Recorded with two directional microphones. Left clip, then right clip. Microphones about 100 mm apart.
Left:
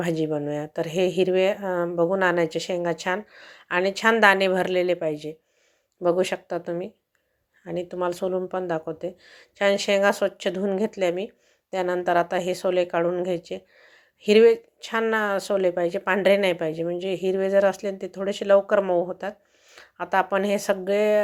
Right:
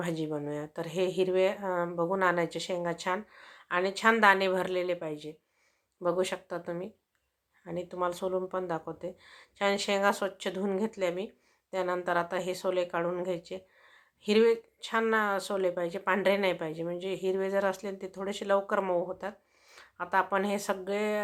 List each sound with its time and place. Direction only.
0.0 s speech: 40° left (ahead or behind)